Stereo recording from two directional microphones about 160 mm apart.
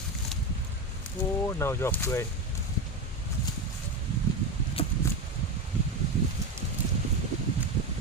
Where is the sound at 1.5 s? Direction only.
15° left (ahead or behind).